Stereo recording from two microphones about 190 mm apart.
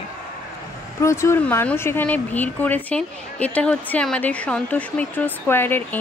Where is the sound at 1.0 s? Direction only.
15° left (ahead or behind).